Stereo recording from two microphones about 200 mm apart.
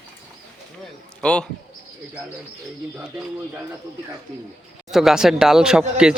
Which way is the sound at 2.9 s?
5° right (ahead or behind).